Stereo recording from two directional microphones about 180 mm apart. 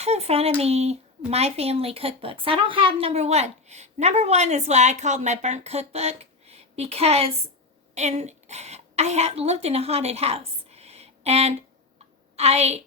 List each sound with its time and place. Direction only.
0.0 s a woman's voice: 35° right (ahead or behind)